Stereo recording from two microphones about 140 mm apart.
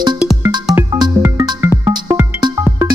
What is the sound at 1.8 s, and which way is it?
Music, 25° right (ahead or behind).